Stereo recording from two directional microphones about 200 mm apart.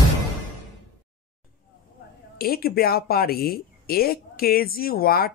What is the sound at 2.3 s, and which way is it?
Speech, 50° left (ahead or behind).